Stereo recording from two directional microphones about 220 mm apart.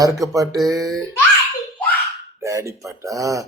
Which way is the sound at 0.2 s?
15° right (ahead or behind).